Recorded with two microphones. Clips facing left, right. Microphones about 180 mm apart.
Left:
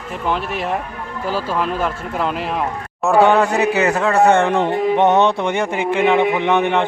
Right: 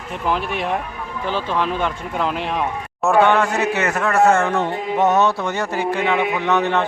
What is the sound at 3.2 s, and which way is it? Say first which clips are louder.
Speech: left 3 dB; 35° left (ahead or behind).